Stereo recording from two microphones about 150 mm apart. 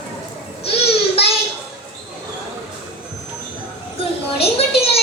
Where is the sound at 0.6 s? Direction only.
40° left (ahead or behind).